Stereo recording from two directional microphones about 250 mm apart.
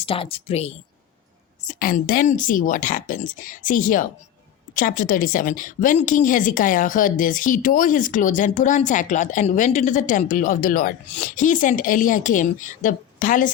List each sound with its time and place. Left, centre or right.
0.0 s speech: left
1.6 s a woman's voice: left